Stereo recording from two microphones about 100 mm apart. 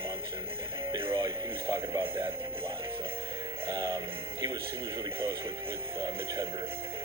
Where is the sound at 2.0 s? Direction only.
60° right (ahead or behind).